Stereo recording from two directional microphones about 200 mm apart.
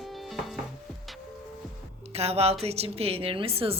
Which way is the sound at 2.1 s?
30° right (ahead or behind).